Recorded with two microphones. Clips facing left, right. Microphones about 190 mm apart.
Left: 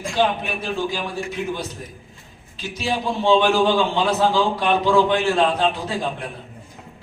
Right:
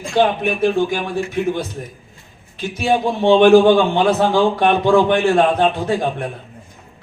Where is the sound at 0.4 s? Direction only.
55° right (ahead or behind).